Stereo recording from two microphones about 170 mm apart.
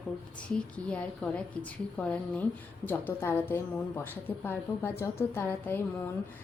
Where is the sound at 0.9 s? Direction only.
5° left (ahead or behind).